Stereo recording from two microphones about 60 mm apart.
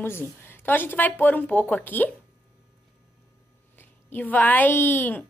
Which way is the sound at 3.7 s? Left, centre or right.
Left.